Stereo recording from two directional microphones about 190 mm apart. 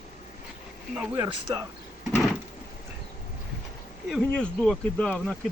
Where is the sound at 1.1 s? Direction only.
20° right (ahead or behind).